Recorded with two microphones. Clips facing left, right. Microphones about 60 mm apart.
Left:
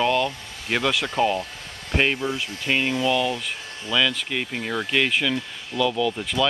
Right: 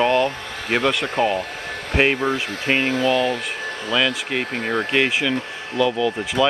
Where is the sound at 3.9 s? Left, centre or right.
Centre.